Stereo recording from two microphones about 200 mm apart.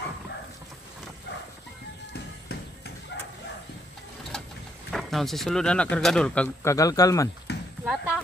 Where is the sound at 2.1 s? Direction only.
55° left (ahead or behind).